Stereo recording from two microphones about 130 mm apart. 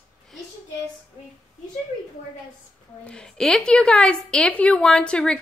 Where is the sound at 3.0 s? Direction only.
5° left (ahead or behind).